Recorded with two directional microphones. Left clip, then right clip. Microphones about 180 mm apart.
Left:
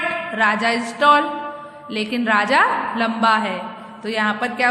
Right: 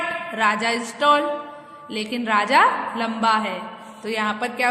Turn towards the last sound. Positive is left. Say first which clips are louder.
# left 3 dB
turn(degrees=-20)  # may be behind; listen again after turning